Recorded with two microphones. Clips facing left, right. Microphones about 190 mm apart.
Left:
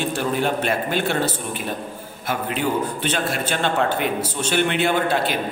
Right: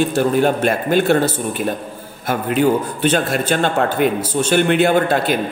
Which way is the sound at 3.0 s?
45° right (ahead or behind).